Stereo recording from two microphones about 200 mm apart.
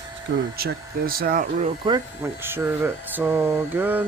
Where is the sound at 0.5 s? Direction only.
50° right (ahead or behind).